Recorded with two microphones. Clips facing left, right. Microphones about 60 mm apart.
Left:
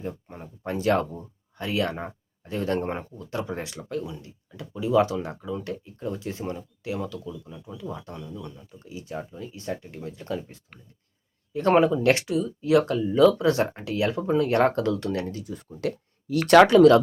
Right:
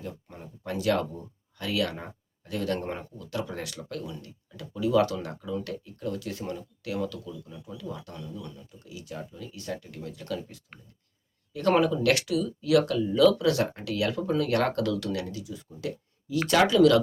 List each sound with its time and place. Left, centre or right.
0.0 s speech: left